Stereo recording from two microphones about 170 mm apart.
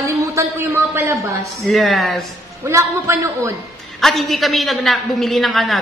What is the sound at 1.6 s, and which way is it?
Speech, centre (ahead or behind).